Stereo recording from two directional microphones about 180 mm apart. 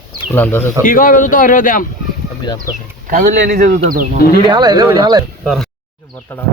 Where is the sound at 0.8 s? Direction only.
50° left (ahead or behind).